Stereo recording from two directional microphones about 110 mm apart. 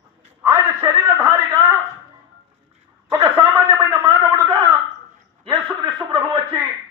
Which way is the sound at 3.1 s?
25° right (ahead or behind).